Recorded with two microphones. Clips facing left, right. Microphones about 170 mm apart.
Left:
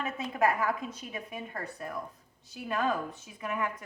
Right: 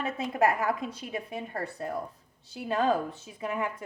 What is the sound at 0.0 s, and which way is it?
A woman's voice, 30° right (ahead or behind).